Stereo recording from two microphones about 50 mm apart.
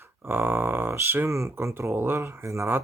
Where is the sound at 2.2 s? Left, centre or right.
Right.